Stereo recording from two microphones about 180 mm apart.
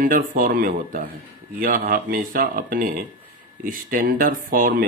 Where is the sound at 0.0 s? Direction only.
50° right (ahead or behind).